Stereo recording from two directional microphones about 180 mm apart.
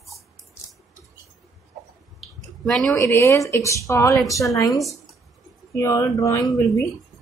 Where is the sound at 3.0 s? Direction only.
15° left (ahead or behind).